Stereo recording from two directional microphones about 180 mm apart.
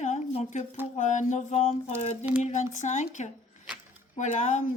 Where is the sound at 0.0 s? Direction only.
40° left (ahead or behind).